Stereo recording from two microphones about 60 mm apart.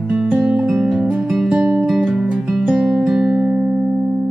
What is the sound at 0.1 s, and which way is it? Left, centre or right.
Music, centre.